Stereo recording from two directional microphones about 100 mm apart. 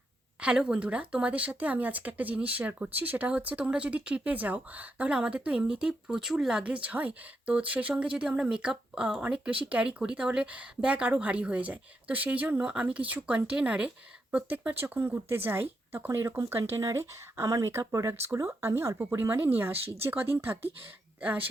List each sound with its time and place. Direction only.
0.4 s speech: 10° right (ahead or behind)